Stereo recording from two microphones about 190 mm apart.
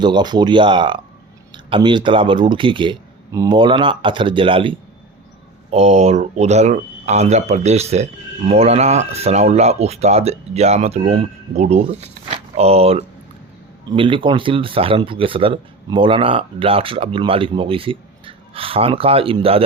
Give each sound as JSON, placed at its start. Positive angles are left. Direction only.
{"t": 0.0, "sound": "speech", "side_deg": -25}
{"t": 5.7, "sound": "speech", "side_deg": -35}